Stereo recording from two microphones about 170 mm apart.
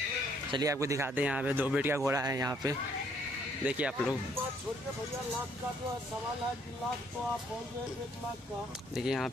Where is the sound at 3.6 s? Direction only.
5° right (ahead or behind).